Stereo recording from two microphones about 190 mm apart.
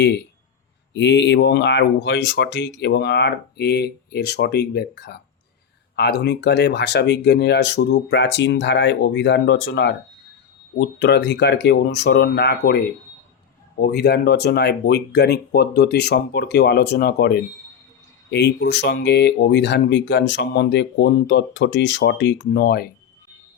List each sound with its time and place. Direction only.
0.0 s speech: 65° left (ahead or behind)